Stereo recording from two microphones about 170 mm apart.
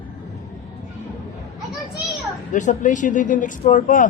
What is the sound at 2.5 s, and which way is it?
Speech, 45° left (ahead or behind).